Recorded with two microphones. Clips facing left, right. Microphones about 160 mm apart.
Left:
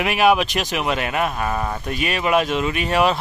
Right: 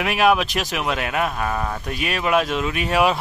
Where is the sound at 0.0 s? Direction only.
Centre (ahead or behind).